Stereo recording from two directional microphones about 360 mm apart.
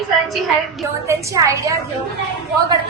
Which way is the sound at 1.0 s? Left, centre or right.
Centre.